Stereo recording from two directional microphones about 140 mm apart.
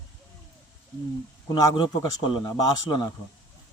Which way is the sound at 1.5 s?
25° left (ahead or behind).